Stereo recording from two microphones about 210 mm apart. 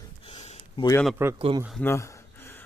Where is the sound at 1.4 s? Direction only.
25° right (ahead or behind).